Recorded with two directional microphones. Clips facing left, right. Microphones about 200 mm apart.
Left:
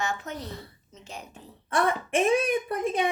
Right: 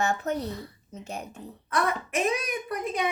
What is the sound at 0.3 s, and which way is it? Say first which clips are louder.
Speech: right 8 dB; 65° right (ahead or behind).